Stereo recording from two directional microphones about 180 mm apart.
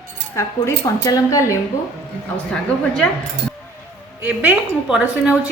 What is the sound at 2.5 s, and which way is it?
Speech, 5° left (ahead or behind).